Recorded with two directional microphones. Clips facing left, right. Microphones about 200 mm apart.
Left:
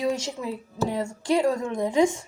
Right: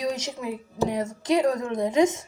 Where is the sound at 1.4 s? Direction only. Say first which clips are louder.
Even; 25° left (ahead or behind).